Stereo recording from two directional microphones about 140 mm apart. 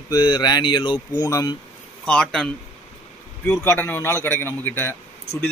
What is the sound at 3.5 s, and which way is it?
A man's voice, 15° left (ahead or behind).